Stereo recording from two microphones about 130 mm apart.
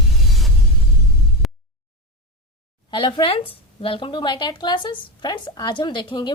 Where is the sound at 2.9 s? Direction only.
40° left (ahead or behind).